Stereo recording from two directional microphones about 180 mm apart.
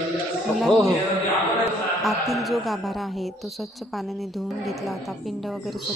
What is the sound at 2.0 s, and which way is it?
A woman's voice, centre (ahead or behind).